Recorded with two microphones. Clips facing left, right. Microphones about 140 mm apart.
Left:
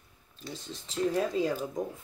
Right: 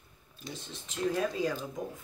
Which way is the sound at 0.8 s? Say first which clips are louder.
Left 2 dB; 30° left (ahead or behind).